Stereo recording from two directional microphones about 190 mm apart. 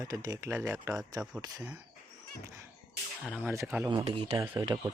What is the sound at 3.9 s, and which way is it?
Speech, 25° right (ahead or behind).